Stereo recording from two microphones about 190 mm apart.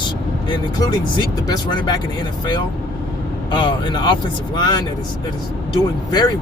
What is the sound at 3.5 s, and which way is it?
A man's voice, 25° left (ahead or behind).